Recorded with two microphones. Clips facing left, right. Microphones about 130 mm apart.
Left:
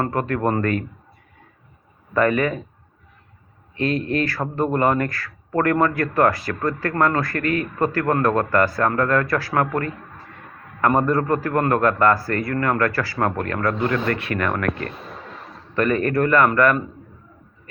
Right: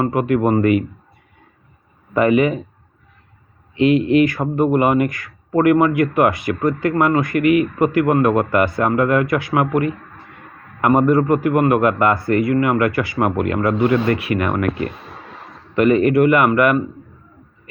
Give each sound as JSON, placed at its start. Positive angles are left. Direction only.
{"t": 0.0, "sound": "speech", "side_deg": -10}
{"t": 2.1, "sound": "speech", "side_deg": -15}
{"t": 3.8, "sound": "speech", "side_deg": -15}